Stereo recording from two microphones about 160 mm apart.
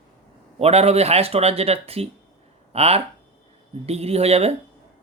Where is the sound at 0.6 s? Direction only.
40° right (ahead or behind).